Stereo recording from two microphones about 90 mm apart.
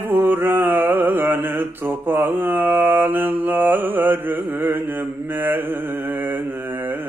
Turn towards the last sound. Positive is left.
turn(degrees=-20)  # may be behind; listen again after turning